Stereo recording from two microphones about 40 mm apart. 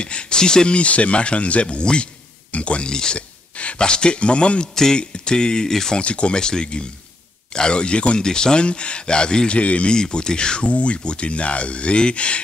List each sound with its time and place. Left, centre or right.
0.0 s speech: left
0.7 s speech: left
2.9 s speech: centre
3.2 s speech: left; by 5.9 s centre
5.9 s speech: left
8.2 s speech: centre
9.5 s speech: left
9.9 s speech: centre